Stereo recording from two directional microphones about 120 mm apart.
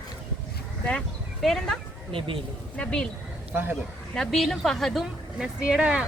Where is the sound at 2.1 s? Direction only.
45° right (ahead or behind).